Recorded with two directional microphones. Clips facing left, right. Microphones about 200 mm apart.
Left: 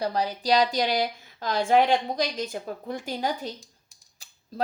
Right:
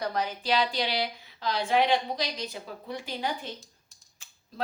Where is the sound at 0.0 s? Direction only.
35° left (ahead or behind).